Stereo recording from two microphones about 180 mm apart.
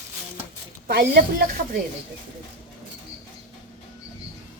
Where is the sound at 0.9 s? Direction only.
55° right (ahead or behind).